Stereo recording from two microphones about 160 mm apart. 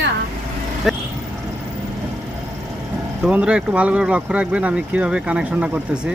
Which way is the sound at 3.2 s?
5° right (ahead or behind).